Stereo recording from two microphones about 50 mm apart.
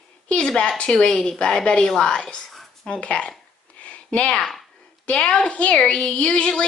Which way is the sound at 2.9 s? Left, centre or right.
Left.